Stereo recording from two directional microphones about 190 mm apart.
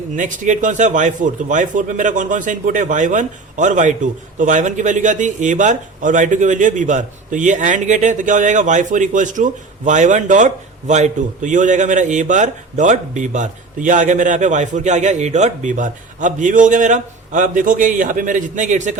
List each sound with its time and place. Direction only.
0.2 s a man's voice: 40° right (ahead or behind)